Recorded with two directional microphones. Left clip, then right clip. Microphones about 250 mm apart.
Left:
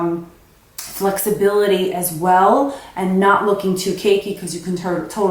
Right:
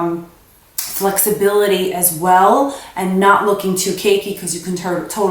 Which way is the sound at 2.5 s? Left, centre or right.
Left.